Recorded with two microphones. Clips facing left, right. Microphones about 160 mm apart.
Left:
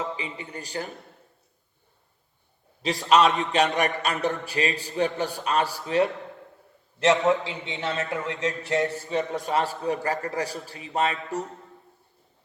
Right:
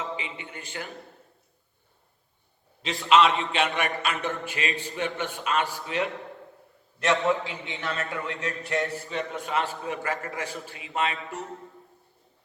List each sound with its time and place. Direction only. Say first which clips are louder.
0.0 s a man's voice: left 2 dB; 35° left (ahead or behind)
2.8 s a man's voice: left 1 dB; 40° left (ahead or behind)
7.0 s a sound: left 3 dB; 20° left (ahead or behind)
9.0 s a man's voice: left 5 dB; 35° left (ahead or behind)